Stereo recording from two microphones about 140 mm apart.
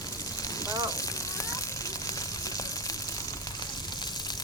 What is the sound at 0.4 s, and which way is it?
Rain on surface, 25° left (ahead or behind).